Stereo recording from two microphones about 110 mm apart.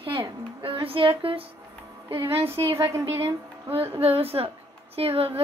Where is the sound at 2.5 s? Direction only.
25° right (ahead or behind).